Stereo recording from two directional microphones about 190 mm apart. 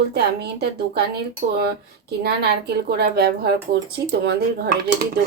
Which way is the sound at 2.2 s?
55° right (ahead or behind).